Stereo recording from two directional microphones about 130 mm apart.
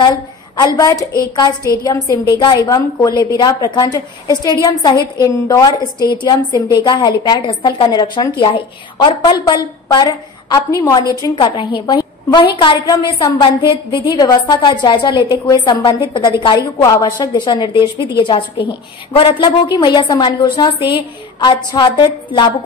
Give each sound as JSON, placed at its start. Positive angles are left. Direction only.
{"t": 0.0, "sound": "a sound", "side_deg": 35}
{"t": 0.7, "sound": "a woman's voice", "side_deg": 25}
{"t": 11.3, "sound": "a woman's voice", "side_deg": 40}